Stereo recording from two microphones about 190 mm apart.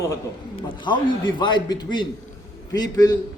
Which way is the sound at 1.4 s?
25° left (ahead or behind).